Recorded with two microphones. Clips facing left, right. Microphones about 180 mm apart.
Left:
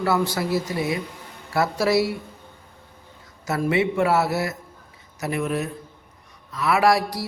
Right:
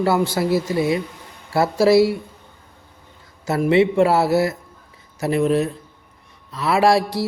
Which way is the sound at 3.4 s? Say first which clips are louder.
Right 6 dB; 30° right (ahead or behind).